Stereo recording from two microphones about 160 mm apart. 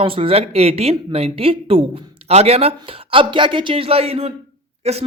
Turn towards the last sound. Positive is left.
turn(degrees=-40)  # may be behind; listen again after turning